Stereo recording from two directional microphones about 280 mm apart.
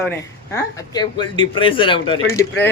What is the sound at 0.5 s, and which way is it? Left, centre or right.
Speech, centre.